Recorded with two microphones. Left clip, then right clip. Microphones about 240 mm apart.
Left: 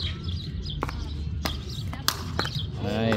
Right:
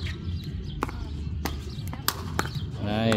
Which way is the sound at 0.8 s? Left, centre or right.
Right.